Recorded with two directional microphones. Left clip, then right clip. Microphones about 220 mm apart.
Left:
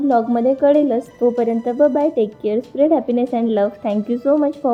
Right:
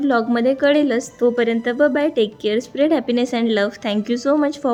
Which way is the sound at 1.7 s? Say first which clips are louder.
Left 2 dB; 15° right (ahead or behind).